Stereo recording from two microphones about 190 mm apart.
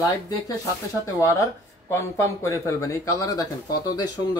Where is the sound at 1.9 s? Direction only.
15° left (ahead or behind).